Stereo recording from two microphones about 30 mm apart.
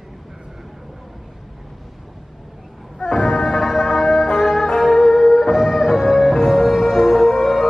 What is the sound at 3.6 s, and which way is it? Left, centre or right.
Music, centre.